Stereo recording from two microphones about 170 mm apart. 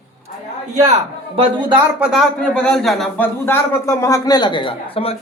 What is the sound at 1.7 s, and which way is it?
Speech, 5° right (ahead or behind).